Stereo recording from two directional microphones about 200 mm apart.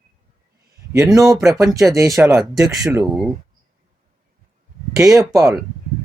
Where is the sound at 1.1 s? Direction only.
20° right (ahead or behind).